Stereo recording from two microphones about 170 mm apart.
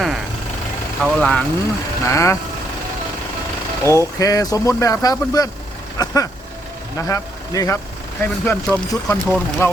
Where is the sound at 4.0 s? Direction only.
20° left (ahead or behind).